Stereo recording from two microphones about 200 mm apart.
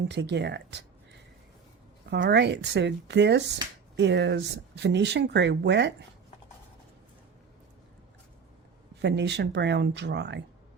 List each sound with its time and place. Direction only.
0.1 s speech: 60° right (ahead or behind)
2.2 s speech: 60° right (ahead or behind)
9.0 s speech: 60° right (ahead or behind)